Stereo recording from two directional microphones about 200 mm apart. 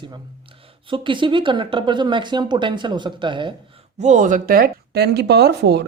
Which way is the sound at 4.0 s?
40° right (ahead or behind).